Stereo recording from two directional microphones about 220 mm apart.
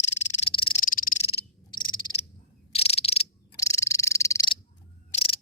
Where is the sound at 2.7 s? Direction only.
25° left (ahead or behind).